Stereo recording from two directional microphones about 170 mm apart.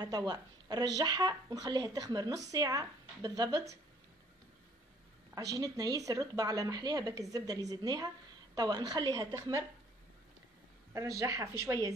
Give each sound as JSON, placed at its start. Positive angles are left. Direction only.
{"t": 0.0, "sound": "speech", "side_deg": -25}
{"t": 5.3, "sound": "speech", "side_deg": -20}
{"t": 10.9, "sound": "speech", "side_deg": -20}